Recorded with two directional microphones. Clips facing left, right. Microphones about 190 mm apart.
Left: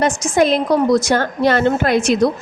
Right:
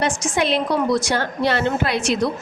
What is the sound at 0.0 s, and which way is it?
A woman's voice, 45° left (ahead or behind).